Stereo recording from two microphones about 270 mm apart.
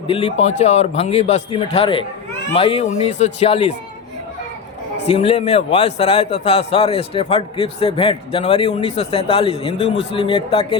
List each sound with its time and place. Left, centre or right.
0.1 s a man's voice: left
5.0 s a man's voice: left